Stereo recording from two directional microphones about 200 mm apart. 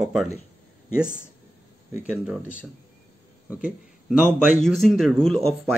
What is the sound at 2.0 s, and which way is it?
Speech, 5° right (ahead or behind).